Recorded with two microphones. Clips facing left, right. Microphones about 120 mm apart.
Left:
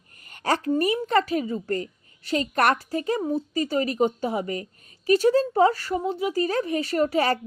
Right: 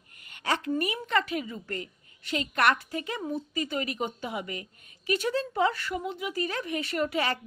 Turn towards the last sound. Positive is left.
turn(degrees=40)  # may be behind; listen again after turning